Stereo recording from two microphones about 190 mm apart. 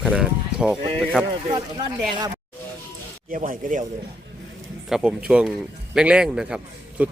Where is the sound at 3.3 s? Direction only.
45° right (ahead or behind).